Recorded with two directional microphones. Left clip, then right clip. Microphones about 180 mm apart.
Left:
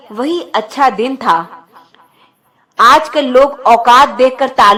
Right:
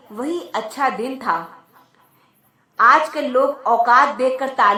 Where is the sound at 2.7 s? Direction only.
55° left (ahead or behind).